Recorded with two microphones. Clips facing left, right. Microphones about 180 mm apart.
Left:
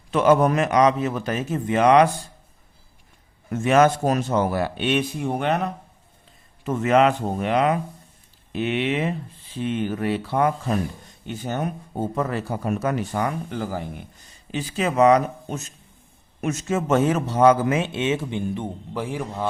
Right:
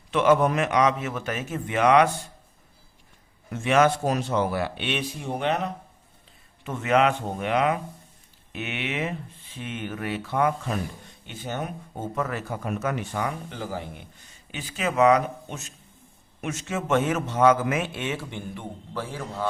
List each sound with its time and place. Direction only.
0.1 s speech: 40° left (ahead or behind)
3.5 s a man's voice: 45° left (ahead or behind)
6.7 s speech: 40° left (ahead or behind)
14.5 s a man's voice: 35° left (ahead or behind); by 19.5 s 15° left (ahead or behind)